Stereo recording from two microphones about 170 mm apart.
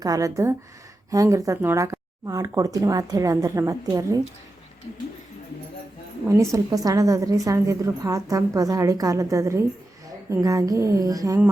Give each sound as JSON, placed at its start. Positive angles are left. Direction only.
{"t": 0.0, "sound": "a woman's voice", "side_deg": -20}
{"t": 6.2, "sound": "a woman's voice", "side_deg": -15}